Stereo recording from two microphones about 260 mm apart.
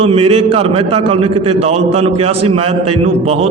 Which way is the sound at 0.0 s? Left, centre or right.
Right.